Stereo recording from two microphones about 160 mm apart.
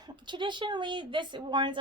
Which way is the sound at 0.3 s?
30° right (ahead or behind).